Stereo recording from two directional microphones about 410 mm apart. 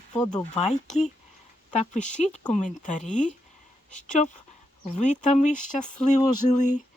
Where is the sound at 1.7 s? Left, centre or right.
Centre.